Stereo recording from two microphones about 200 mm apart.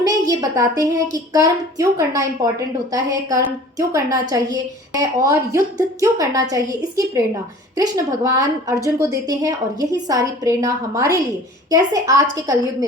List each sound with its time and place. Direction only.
0.0 s a woman's voice: 20° right (ahead or behind)